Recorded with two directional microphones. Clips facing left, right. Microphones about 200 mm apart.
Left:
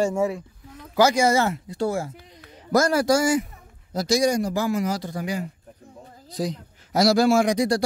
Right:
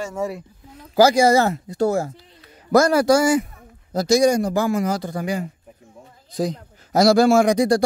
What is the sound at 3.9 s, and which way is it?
Speech, 45° right (ahead or behind).